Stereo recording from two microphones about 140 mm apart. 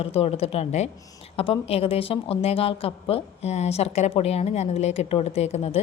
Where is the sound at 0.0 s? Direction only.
45° left (ahead or behind).